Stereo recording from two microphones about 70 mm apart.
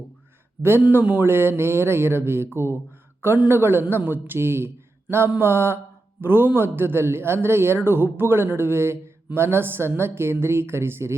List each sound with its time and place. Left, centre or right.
0.6 s speech: right